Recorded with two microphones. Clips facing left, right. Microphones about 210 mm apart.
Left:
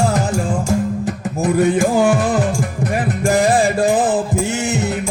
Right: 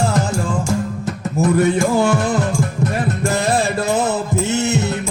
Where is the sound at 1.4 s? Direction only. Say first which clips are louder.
Even; 15° left (ahead or behind).